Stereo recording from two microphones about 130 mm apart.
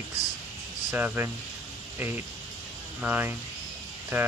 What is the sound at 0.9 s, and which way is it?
Speech, 15° right (ahead or behind).